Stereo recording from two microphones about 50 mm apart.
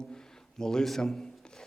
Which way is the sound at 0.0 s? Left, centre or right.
Centre.